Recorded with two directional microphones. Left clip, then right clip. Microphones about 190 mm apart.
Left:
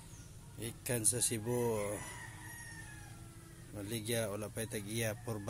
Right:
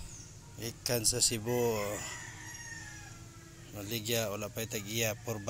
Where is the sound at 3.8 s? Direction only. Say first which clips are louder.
Right 4 dB; 5° left (ahead or behind).